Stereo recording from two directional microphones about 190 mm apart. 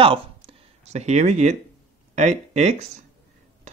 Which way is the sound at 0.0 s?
30° right (ahead or behind).